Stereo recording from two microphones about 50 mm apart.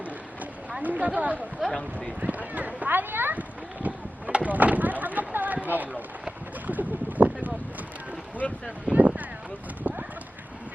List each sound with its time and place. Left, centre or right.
0.8 s speech: right
1.6 s speech: centre
2.2 s a sound: right
5.6 s speech: right
8.4 s speech: left
8.9 s a sound: right
9.8 s horse: right